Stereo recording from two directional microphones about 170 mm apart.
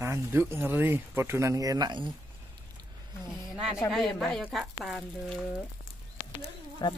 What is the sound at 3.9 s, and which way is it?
Speech, centre (ahead or behind).